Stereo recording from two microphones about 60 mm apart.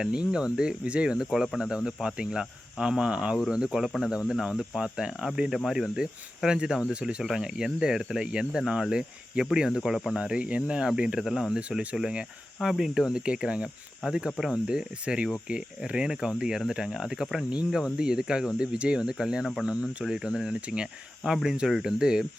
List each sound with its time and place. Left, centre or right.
0.0 s speech: centre
3.5 s cricket: centre
4.1 s speech: centre
10.2 s speech: centre